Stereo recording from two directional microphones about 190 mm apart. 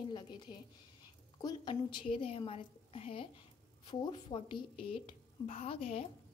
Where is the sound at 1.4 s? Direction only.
25° left (ahead or behind).